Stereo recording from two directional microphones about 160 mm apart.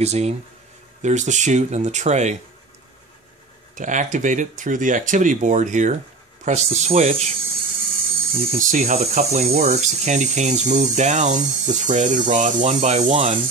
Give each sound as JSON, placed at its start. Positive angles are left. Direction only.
{"t": 0.0, "sound": "speech", "side_deg": -40}
{"t": 3.7, "sound": "speech", "side_deg": -50}
{"t": 8.4, "sound": "speech", "side_deg": -55}